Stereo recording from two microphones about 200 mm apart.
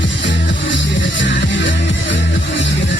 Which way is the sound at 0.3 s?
65° left (ahead or behind).